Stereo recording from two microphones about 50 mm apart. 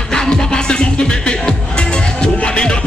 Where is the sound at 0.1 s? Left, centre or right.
Centre.